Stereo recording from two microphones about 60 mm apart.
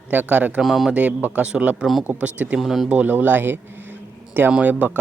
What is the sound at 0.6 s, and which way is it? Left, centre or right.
Speech, centre.